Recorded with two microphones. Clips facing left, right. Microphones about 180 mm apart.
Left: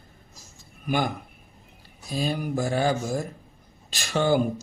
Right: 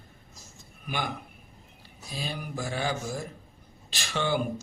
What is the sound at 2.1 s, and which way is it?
Speech, 45° left (ahead or behind).